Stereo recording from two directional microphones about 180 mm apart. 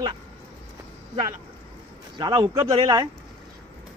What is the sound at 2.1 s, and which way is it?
Speech, 25° right (ahead or behind).